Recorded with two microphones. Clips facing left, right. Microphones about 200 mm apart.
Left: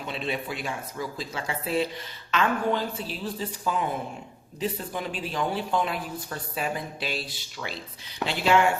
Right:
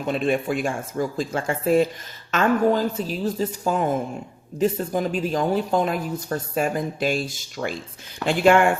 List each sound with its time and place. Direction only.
0.1 s a woman's voice: 50° right (ahead or behind)